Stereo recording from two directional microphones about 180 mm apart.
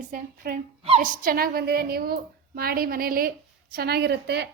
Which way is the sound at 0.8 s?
30° right (ahead or behind).